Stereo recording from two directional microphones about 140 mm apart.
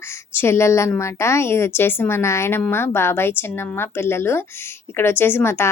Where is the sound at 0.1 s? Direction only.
20° left (ahead or behind).